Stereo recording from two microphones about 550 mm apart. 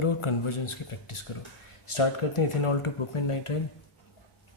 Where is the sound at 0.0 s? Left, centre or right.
Left.